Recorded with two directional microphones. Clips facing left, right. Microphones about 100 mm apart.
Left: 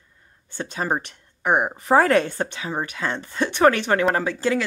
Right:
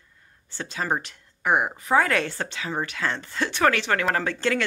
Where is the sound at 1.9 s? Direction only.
35° left (ahead or behind).